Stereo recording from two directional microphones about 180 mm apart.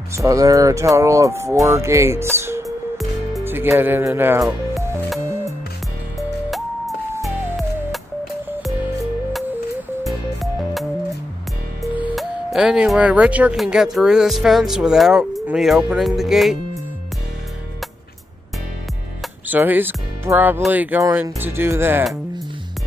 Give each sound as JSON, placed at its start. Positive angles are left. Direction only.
{"t": 0.2, "sound": "speech", "side_deg": -20}
{"t": 10.0, "sound": "music", "side_deg": 0}
{"t": 11.8, "sound": "speech", "side_deg": -10}
{"t": 19.5, "sound": "speech", "side_deg": -10}